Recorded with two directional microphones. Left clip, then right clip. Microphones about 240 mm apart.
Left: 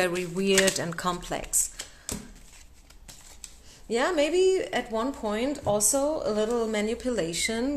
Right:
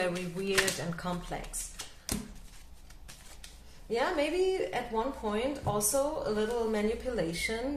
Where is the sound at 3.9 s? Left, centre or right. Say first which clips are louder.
Left 5 dB; left.